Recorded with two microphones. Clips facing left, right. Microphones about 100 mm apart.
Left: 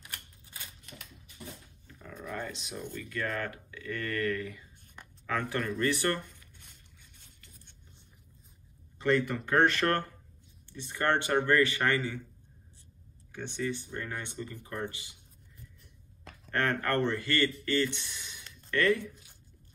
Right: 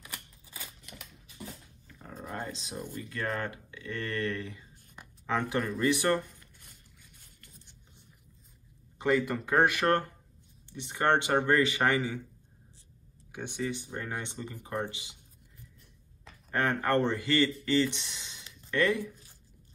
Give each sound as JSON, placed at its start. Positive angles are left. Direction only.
{"t": 2.0, "sound": "dog", "side_deg": -40}
{"t": 2.9, "sound": "speech", "side_deg": -30}
{"t": 4.9, "sound": "a sound", "side_deg": -20}
{"t": 5.6, "sound": "speech", "side_deg": -5}
{"t": 5.9, "sound": "speech", "side_deg": -15}
{"t": 8.9, "sound": "a man's voice", "side_deg": -10}
{"t": 9.8, "sound": "speech", "side_deg": -20}
{"t": 13.3, "sound": "speech", "side_deg": -15}
{"t": 16.4, "sound": "speech", "side_deg": -15}